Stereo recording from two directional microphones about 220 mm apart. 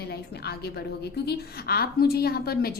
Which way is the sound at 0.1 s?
45° left (ahead or behind).